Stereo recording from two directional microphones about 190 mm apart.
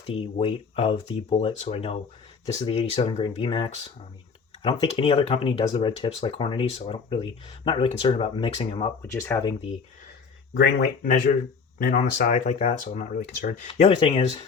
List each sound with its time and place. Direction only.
0.0 s speech: 30° left (ahead or behind)
9.0 s speech: 10° left (ahead or behind)
10.5 s speech: 70° left (ahead or behind)
11.8 s speech: 50° left (ahead or behind)
13.1 s speech: 50° left (ahead or behind)
13.7 s speech: 30° left (ahead or behind)